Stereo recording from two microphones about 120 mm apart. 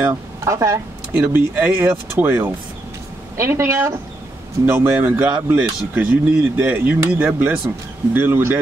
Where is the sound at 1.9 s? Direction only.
20° right (ahead or behind).